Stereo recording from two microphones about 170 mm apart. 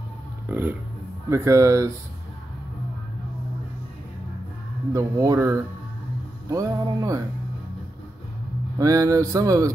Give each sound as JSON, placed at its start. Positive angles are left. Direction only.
{"t": 0.5, "sound": "speech", "side_deg": -10}
{"t": 4.9, "sound": "speech", "side_deg": -20}
{"t": 8.7, "sound": "speech", "side_deg": -20}